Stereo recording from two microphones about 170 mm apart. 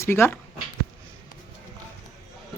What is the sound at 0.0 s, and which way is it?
Speech, 15° left (ahead or behind).